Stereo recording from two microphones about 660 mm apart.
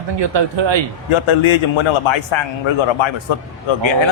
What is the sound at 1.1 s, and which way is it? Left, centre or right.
Speech, left.